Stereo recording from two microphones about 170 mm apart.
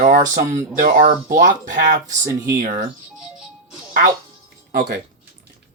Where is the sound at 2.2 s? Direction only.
15° right (ahead or behind).